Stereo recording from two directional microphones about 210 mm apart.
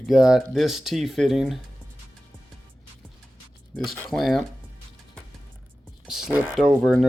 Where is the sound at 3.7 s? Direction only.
Centre (ahead or behind).